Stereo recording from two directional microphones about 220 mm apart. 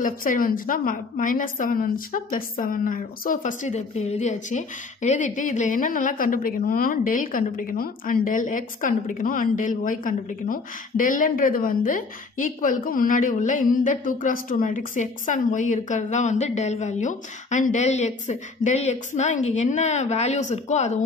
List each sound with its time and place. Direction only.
0.0 s a woman's voice: 40° left (ahead or behind)